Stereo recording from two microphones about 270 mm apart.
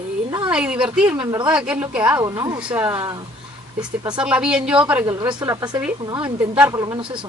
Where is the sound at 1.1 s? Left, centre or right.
Centre.